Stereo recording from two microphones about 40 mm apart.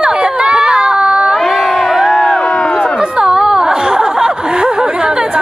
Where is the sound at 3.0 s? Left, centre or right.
Centre.